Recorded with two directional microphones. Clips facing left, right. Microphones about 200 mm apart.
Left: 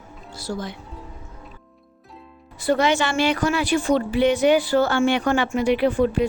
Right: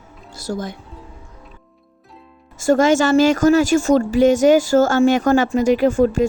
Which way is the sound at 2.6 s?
45° right (ahead or behind).